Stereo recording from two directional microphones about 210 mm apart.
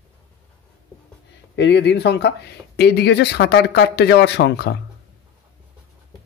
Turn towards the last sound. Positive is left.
turn(degrees=50)  # may be behind; listen again after turning